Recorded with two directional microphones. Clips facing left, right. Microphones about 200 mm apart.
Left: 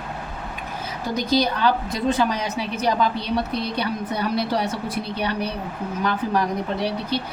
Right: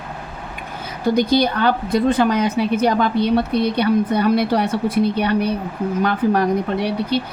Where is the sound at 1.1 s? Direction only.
55° right (ahead or behind).